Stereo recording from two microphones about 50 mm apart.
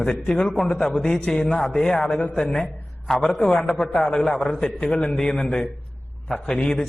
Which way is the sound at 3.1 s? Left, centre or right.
Centre.